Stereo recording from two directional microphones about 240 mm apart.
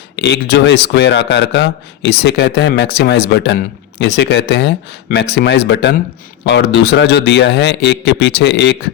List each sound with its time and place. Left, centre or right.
0.2 s a man's voice: left